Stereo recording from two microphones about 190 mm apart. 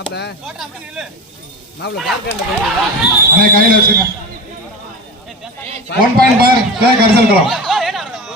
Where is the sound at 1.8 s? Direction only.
65° left (ahead or behind).